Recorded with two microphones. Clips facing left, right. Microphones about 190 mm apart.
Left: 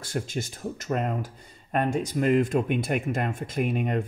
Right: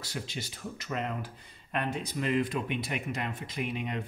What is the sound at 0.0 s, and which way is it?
Speech, 50° left (ahead or behind).